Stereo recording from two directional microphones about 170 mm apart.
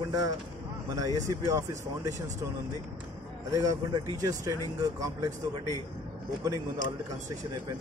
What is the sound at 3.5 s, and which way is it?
A man's voice, 20° right (ahead or behind).